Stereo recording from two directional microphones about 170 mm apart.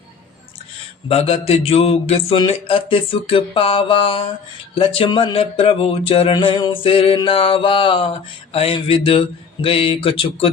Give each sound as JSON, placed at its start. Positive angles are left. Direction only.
{"t": 1.0, "sound": "speech", "side_deg": 35}